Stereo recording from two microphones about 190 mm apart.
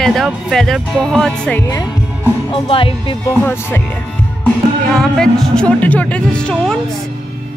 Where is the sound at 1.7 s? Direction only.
15° left (ahead or behind).